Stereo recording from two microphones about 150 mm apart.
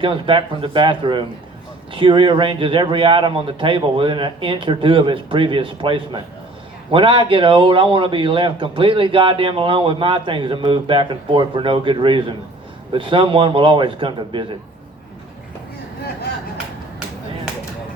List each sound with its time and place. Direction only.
0.0 s a man's voice: 35° right (ahead or behind)